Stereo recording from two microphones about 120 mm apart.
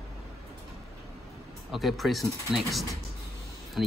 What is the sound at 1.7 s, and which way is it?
Speech, centre (ahead or behind).